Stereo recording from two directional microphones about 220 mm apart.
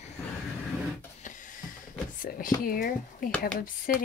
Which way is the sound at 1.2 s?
35° left (ahead or behind).